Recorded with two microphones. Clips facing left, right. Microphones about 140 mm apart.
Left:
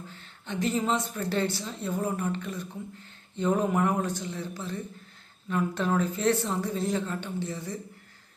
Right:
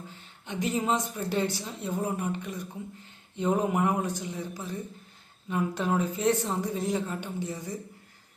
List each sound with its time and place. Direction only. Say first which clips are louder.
0.1 s speech: left 2 dB; 15° right (ahead or behind)